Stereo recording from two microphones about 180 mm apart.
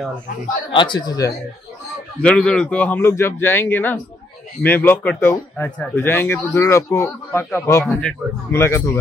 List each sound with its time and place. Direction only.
0.7 s speech: 25° left (ahead or behind)
2.2 s speech: 5° left (ahead or behind)